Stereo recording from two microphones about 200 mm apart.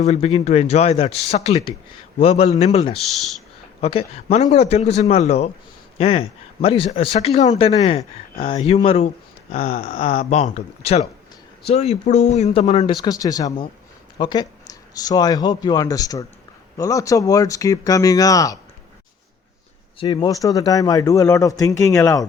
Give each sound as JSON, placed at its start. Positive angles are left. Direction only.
{"t": 0.0, "sound": "speech", "side_deg": 30}
{"t": 3.0, "sound": "speech", "side_deg": 0}
{"t": 3.8, "sound": "speech", "side_deg": 30}
{"t": 20.0, "sound": "speech", "side_deg": 20}